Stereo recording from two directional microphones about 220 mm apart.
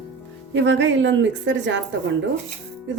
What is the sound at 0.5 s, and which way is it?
A woman's voice, 55° right (ahead or behind).